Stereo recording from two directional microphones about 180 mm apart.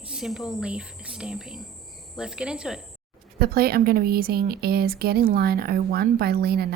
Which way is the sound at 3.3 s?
55° right (ahead or behind).